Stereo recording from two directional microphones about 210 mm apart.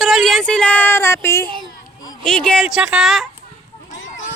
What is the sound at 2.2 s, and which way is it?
Speech, 5° left (ahead or behind).